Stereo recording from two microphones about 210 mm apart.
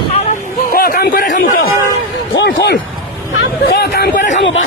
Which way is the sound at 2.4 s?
55° left (ahead or behind).